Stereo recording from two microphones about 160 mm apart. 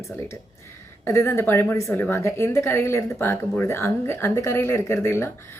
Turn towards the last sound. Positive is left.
turn(degrees=15)  # may be behind; listen again after turning